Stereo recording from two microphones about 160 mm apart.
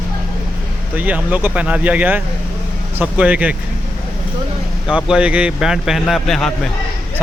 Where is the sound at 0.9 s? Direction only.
10° right (ahead or behind).